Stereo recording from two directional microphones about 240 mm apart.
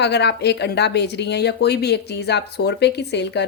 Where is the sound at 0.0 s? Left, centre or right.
Left.